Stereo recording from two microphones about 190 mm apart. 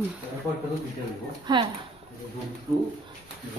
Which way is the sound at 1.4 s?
25° right (ahead or behind).